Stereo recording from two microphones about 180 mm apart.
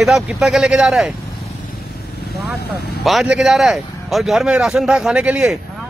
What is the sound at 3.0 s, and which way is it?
A man's voice, centre (ahead or behind).